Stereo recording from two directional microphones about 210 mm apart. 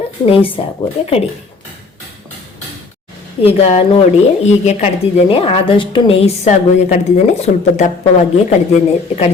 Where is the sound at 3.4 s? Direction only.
30° left (ahead or behind).